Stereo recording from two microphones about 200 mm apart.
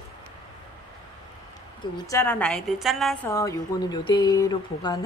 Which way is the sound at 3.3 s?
15° left (ahead or behind).